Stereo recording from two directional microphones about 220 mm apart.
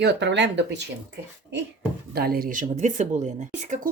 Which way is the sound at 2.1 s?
45° right (ahead or behind).